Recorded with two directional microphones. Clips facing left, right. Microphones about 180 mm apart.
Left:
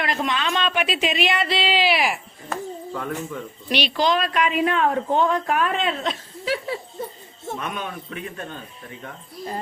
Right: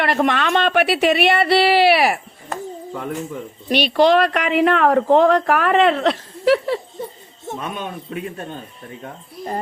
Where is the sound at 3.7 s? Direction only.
55° right (ahead or behind).